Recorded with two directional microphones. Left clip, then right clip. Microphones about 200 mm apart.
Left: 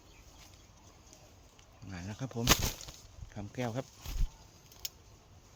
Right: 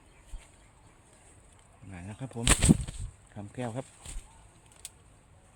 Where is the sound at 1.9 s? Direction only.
5° right (ahead or behind).